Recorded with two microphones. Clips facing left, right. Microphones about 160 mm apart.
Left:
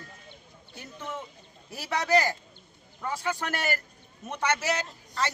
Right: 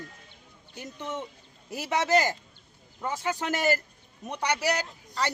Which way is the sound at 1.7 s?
20° right (ahead or behind).